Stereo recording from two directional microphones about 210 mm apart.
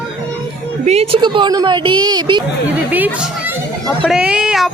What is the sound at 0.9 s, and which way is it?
A woman's voice, 30° right (ahead or behind).